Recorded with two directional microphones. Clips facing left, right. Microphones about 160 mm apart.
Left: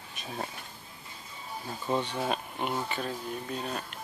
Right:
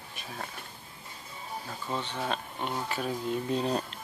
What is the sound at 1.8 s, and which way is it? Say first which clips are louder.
Speech: left 4 dB; 15° left (ahead or behind).